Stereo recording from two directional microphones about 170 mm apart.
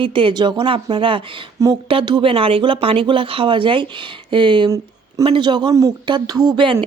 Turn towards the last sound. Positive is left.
turn(degrees=-30)  # may be behind; listen again after turning